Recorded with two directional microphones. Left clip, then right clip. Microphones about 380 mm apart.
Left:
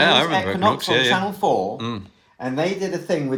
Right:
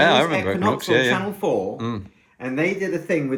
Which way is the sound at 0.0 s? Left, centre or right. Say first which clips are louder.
Even; centre.